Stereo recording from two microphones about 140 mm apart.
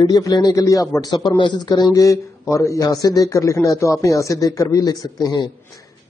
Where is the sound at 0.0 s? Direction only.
25° left (ahead or behind).